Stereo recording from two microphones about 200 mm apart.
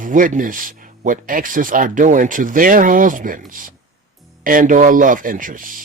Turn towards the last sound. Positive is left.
turn(degrees=-45)  # may be behind; listen again after turning